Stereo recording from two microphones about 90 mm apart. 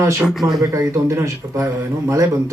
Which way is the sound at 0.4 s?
45° right (ahead or behind).